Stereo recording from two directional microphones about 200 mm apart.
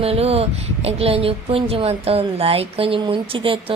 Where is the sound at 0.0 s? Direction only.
30° right (ahead or behind).